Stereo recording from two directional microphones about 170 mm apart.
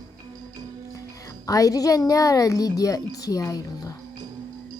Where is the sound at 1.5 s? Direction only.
20° left (ahead or behind).